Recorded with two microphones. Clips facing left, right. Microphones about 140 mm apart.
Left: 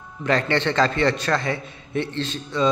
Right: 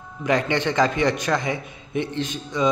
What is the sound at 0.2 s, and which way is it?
A man's voice, 15° right (ahead or behind).